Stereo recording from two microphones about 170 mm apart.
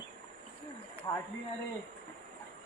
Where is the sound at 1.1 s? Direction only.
20° left (ahead or behind).